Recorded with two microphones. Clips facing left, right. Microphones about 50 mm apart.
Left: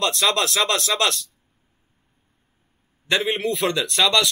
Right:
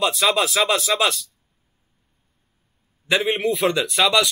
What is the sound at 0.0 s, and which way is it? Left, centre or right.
A man's voice, centre.